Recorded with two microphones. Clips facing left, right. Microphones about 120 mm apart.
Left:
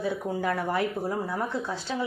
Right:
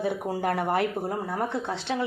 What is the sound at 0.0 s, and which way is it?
Speech, 60° right (ahead or behind).